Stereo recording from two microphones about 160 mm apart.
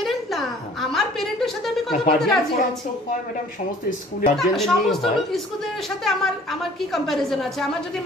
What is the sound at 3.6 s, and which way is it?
Speech, 50° left (ahead or behind).